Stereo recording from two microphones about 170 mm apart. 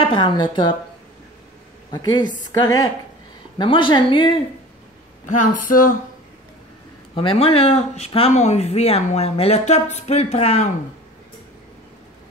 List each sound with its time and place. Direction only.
0.0 s a woman's voice: 30° left (ahead or behind)
1.9 s a woman's voice: 25° left (ahead or behind)
5.2 s speech: 50° left (ahead or behind)
7.2 s speech: 35° left (ahead or behind)